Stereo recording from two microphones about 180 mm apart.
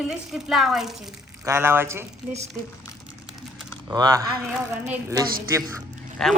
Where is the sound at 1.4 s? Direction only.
15° right (ahead or behind).